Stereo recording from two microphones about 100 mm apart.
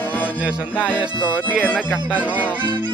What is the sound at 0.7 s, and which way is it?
Music, 15° left (ahead or behind).